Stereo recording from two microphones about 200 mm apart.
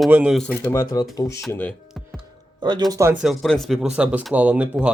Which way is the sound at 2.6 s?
20° right (ahead or behind).